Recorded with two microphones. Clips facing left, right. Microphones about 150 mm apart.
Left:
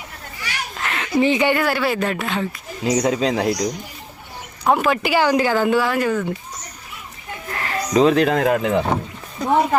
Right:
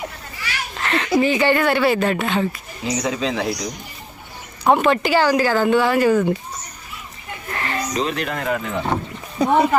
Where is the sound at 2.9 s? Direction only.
45° left (ahead or behind).